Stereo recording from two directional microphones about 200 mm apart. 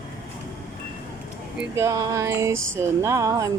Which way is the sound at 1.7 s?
15° right (ahead or behind).